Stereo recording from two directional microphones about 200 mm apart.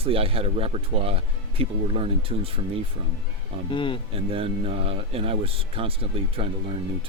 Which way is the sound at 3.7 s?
25° left (ahead or behind).